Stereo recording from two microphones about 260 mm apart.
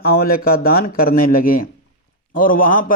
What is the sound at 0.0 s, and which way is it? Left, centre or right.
A man's voice, left.